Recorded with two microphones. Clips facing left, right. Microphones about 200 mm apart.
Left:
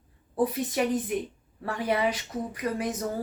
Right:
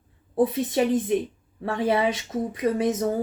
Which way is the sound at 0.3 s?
25° right (ahead or behind).